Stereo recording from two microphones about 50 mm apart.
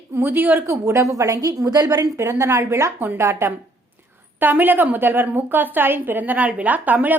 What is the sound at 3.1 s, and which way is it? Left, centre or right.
Speech, right.